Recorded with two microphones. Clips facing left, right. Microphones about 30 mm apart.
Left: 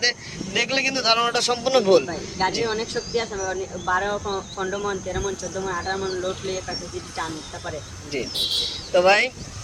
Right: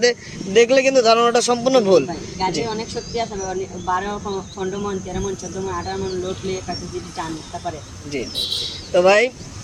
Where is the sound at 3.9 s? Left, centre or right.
Centre.